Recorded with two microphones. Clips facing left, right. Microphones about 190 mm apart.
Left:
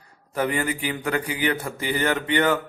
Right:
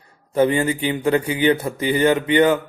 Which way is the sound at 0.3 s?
25° right (ahead or behind).